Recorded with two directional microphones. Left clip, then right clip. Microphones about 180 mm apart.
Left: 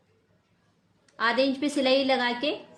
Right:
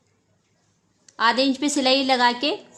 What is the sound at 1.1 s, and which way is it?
A woman's voice, 50° right (ahead or behind).